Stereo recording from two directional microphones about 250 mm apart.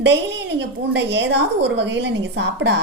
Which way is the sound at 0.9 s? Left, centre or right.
Right.